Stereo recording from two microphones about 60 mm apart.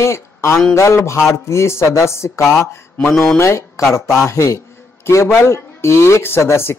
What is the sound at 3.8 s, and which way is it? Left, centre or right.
A man's voice, left.